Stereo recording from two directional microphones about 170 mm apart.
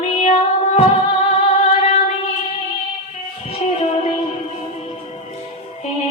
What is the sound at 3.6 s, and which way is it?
Music, 45° left (ahead or behind).